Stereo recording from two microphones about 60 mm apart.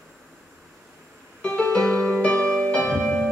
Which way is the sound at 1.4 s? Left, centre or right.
Centre.